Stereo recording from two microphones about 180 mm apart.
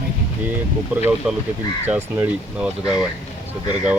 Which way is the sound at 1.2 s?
5° right (ahead or behind).